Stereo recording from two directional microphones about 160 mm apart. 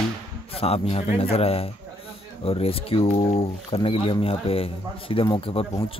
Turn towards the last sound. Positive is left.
turn(degrees=35)  # may be behind; listen again after turning